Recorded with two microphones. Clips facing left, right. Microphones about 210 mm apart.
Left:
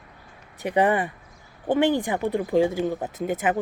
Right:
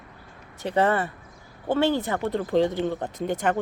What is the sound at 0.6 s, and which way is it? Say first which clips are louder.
Speech: left 1 dB; 15° left (ahead or behind).